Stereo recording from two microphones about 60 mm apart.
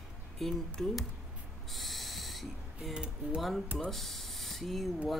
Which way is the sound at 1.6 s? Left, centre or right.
Centre.